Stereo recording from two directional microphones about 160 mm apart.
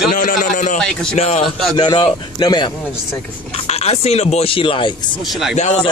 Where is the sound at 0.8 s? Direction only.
5° left (ahead or behind).